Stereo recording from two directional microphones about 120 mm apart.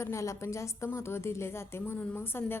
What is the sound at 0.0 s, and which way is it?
A woman's voice, 25° left (ahead or behind).